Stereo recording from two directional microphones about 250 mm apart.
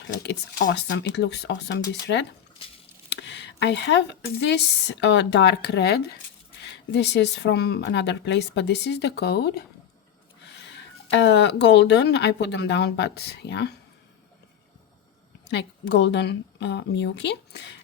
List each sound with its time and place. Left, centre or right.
0.2 s speech: left
11.1 s speech: left
15.4 s speech: left